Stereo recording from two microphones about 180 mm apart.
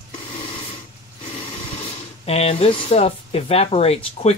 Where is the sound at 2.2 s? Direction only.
35° left (ahead or behind).